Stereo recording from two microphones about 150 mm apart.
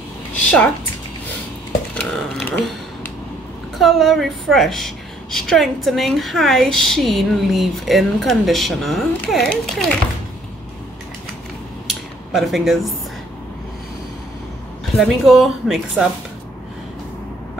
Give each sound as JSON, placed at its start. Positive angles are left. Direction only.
{"t": 0.4, "sound": "a woman's voice", "side_deg": 10}
{"t": 2.0, "sound": "a woman's voice", "side_deg": 10}
{"t": 11.9, "sound": "a sound", "side_deg": 0}
{"t": 15.0, "sound": "a woman's voice", "side_deg": 0}